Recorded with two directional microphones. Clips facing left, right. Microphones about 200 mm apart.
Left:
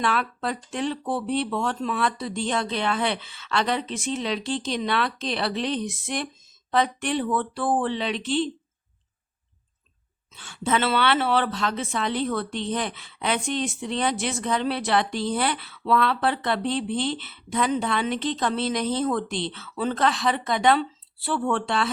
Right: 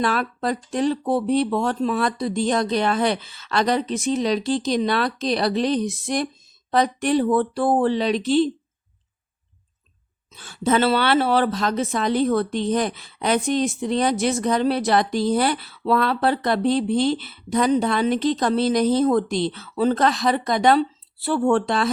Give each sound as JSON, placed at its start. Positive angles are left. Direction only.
{"t": 0.0, "sound": "speech", "side_deg": -40}
{"t": 10.3, "sound": "speech", "side_deg": -40}